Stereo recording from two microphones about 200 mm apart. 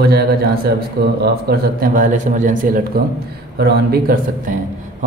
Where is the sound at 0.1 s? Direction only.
50° right (ahead or behind).